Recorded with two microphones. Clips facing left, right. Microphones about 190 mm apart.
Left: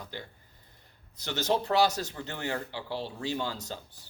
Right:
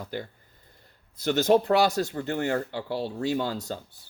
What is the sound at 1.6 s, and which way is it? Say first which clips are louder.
Speech: right 4 dB; 45° right (ahead or behind).